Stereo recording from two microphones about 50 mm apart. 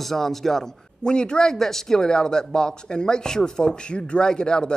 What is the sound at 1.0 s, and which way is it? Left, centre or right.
Speech, centre.